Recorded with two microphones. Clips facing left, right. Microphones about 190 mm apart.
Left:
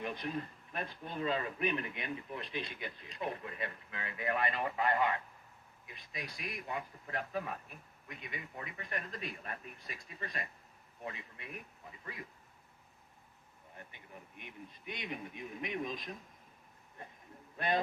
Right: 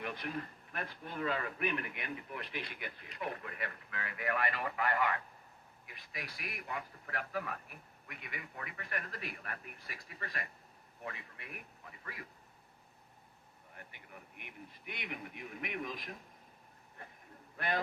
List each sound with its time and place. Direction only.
0.0 s a man's voice: 20° left (ahead or behind)
13.7 s a man's voice: 25° left (ahead or behind)